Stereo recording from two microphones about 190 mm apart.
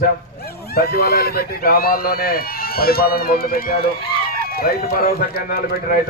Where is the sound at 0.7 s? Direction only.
55° left (ahead or behind).